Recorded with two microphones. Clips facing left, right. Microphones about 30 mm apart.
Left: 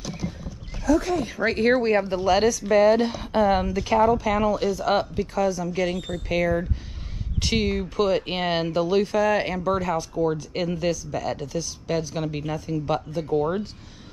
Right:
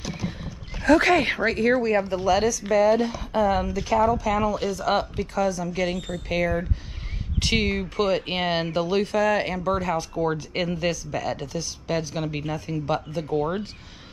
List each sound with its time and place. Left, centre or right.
0.8 s speech: right
1.6 s speech: left
1.9 s speech: left
2.2 s speech: left
3.8 s a woman's voice: left
4.6 s speech: centre
5.8 s speech: centre
10.1 s speech: centre